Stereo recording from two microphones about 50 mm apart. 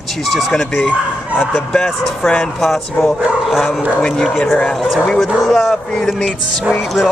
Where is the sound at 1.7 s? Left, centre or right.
Centre.